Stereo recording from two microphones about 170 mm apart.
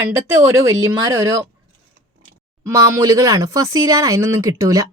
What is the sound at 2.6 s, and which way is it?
Speech, 15° right (ahead or behind).